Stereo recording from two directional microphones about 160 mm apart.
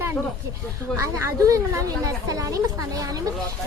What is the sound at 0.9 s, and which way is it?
Speech, 20° right (ahead or behind).